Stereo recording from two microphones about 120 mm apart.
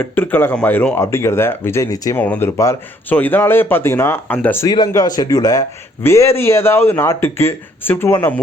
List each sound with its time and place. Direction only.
0.0 s a man's voice: 15° left (ahead or behind)
2.1 s speech: 15° left (ahead or behind)
4.9 s a man's voice: 30° left (ahead or behind)